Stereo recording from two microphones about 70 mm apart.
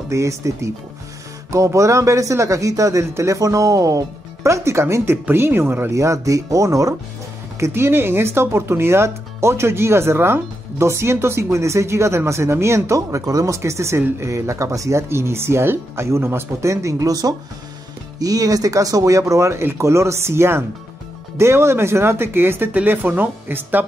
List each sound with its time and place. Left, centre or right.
0.1 s speech: right
5.1 s speech: right
5.9 s speech: right
7.5 s speech: right